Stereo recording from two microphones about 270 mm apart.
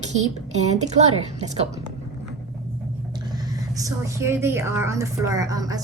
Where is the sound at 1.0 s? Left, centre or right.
Right.